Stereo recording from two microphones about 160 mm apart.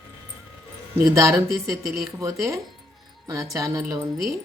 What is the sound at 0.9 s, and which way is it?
Speech, 20° right (ahead or behind).